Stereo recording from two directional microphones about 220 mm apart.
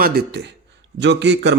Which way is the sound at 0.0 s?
45° right (ahead or behind).